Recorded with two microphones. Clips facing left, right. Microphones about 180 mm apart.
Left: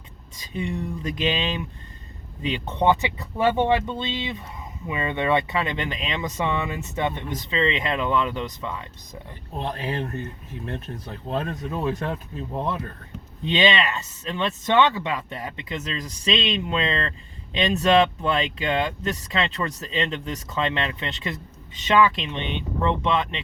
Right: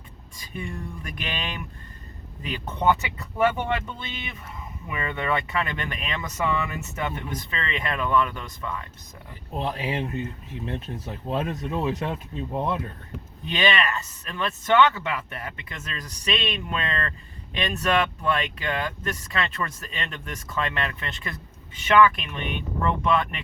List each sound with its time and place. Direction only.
0.3 s speech: 20° left (ahead or behind)
9.6 s speech: 10° right (ahead or behind)
13.5 s speech: 20° left (ahead or behind)